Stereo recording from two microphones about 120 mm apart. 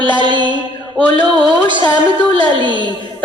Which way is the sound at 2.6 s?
40° right (ahead or behind).